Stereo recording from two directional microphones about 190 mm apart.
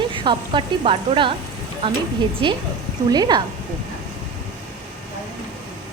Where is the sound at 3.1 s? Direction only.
20° right (ahead or behind).